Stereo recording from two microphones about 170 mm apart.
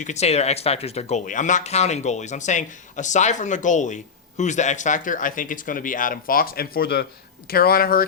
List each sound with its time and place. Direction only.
0.0 s speech: 40° left (ahead or behind); by 8.0 s 60° left (ahead or behind)